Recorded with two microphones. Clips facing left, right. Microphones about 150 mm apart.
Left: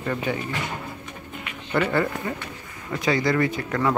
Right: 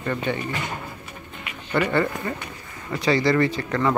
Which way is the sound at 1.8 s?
5° left (ahead or behind).